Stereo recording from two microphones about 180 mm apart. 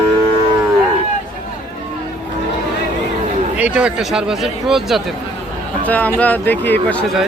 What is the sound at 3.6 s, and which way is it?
Speech, 5° right (ahead or behind).